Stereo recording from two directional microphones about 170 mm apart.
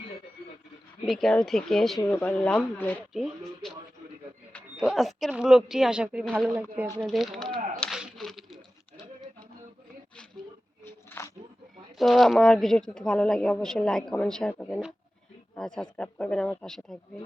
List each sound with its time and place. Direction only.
1.0 s speech: centre (ahead or behind)
3.1 s speech: centre (ahead or behind)
4.8 s speech: centre (ahead or behind)
7.0 s speech: centre (ahead or behind)
7.8 s a sound: centre (ahead or behind)
11.1 s a sound: 10° left (ahead or behind)
11.9 s speech: centre (ahead or behind)